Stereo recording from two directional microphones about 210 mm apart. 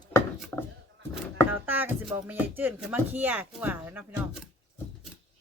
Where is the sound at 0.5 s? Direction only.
10° left (ahead or behind).